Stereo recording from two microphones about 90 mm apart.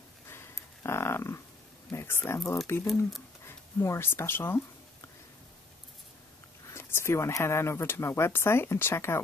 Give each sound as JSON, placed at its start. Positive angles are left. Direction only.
{"t": 0.8, "sound": "a sound", "side_deg": 30}
{"t": 1.9, "sound": "speech", "side_deg": 30}
{"t": 6.7, "sound": "speech", "side_deg": 25}